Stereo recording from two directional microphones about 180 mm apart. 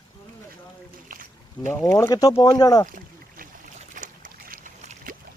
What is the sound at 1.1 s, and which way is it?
Boat, 50° right (ahead or behind).